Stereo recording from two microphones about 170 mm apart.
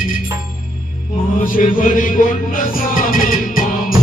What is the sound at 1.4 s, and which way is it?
Chant, 55° left (ahead or behind).